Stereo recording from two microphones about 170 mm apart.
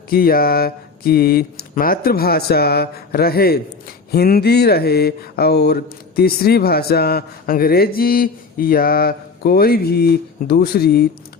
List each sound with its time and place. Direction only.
0.1 s mantra: 60° left (ahead or behind)